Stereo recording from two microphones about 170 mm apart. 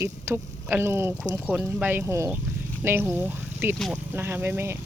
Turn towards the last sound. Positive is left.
turn(degrees=-10)  # may be behind; listen again after turning